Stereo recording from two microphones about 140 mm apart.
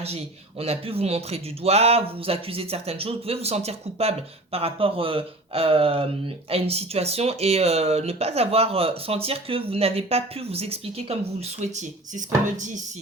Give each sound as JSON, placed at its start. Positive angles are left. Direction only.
{"t": 0.0, "sound": "speech", "side_deg": -45}